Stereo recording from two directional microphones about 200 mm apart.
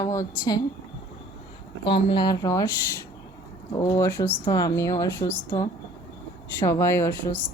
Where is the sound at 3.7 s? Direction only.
15° left (ahead or behind).